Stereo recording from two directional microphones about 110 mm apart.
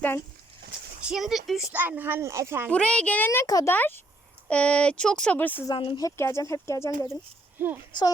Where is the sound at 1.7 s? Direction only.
15° right (ahead or behind).